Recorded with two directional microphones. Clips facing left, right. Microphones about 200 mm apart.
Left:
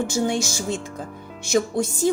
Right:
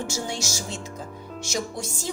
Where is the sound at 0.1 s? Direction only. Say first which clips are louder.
Left 8 dB; 55° left (ahead or behind).